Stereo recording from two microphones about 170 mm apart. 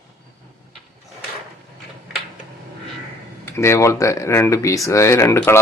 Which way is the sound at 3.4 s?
15° left (ahead or behind).